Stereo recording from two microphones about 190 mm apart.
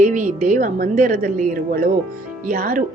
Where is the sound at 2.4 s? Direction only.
50° right (ahead or behind).